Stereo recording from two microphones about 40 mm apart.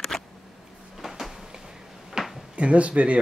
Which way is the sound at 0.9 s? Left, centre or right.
Centre.